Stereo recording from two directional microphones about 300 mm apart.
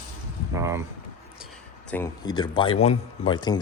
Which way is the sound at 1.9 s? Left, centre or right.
Centre.